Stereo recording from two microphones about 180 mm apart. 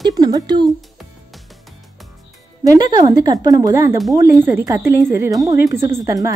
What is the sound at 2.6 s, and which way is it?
A woman's voice, 20° right (ahead or behind).